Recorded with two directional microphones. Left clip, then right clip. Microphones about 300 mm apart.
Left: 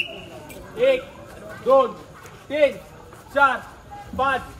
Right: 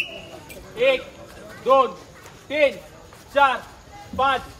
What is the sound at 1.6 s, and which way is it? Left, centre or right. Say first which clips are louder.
Speech: even; right.